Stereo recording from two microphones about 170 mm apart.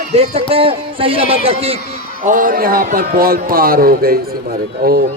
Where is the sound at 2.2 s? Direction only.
50° right (ahead or behind).